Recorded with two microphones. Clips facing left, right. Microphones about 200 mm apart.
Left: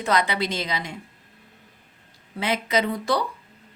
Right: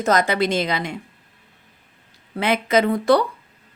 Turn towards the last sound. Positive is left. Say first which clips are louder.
# right 7 dB
turn(degrees=-60)  # may be behind; listen again after turning